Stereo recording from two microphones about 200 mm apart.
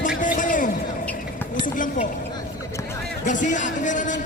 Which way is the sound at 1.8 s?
40° left (ahead or behind).